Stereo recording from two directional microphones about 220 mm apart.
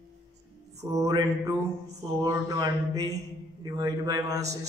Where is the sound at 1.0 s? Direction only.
15° right (ahead or behind).